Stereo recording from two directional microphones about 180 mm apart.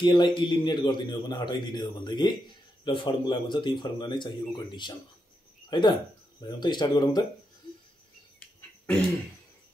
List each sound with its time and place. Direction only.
0.0 s a man's voice: 25° left (ahead or behind)